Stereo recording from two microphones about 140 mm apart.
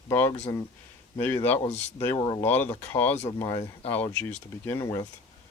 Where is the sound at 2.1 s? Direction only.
40° left (ahead or behind).